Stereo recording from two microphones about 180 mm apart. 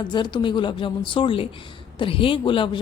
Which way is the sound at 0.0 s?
25° left (ahead or behind).